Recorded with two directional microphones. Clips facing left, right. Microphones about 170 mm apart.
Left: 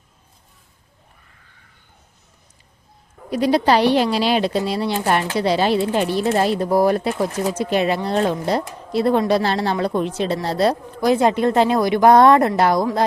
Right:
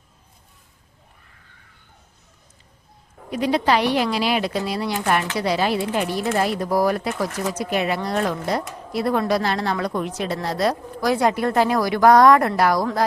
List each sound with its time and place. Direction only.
3.2 s speech: 35° left (ahead or behind)